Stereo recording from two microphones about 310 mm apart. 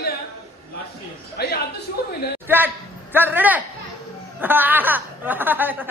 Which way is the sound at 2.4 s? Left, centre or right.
Centre.